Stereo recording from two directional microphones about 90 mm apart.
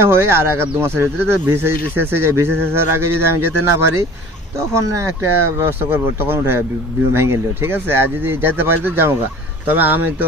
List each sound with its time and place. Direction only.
0.0 s speech: 30° right (ahead or behind)
4.6 s speech: 30° right (ahead or behind)